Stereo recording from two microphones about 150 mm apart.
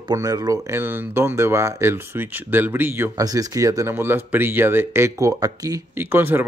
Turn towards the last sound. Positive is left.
turn(degrees=-15)  # may be behind; listen again after turning